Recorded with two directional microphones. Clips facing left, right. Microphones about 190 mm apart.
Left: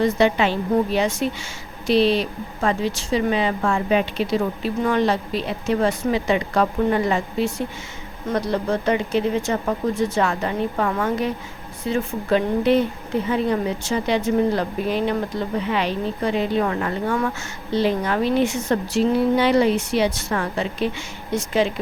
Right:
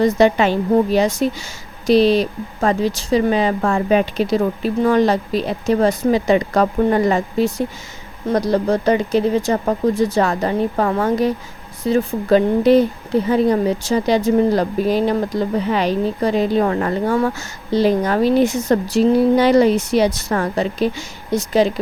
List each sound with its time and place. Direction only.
0.0 s speech: 40° right (ahead or behind)